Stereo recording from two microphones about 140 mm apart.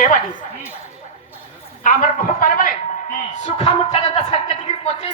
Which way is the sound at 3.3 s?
55° left (ahead or behind).